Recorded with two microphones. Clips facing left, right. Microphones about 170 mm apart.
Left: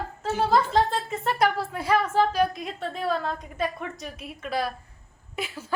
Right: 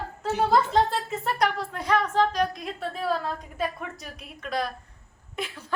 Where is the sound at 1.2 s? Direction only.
Centre (ahead or behind).